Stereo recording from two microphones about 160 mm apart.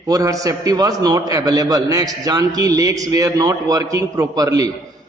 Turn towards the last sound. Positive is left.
turn(degrees=-20)  # may be behind; listen again after turning